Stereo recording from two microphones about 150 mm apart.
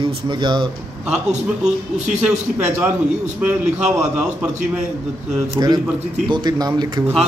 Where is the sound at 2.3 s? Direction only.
10° right (ahead or behind).